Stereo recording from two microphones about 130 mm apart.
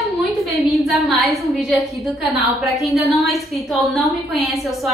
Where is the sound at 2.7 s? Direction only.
Centre (ahead or behind).